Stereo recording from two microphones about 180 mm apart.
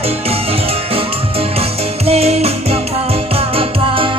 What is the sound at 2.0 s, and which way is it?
Music, 35° right (ahead or behind).